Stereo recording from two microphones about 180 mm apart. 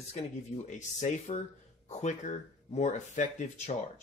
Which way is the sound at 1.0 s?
40° left (ahead or behind).